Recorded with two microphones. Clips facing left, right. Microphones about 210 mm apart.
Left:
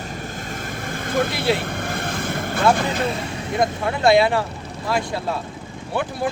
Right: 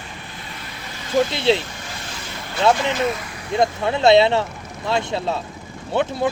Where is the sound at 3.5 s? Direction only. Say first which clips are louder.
Right 3 dB; 25° right (ahead or behind).